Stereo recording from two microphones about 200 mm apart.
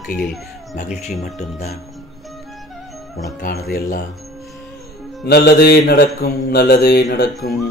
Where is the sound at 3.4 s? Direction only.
50° left (ahead or behind).